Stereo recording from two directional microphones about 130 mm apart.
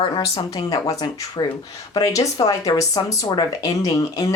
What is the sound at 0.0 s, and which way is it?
Speech, 30° left (ahead or behind).